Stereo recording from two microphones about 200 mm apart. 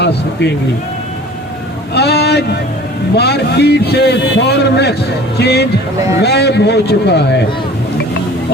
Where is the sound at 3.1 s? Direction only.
55° left (ahead or behind).